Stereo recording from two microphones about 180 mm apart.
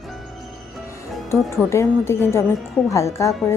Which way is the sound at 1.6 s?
15° left (ahead or behind).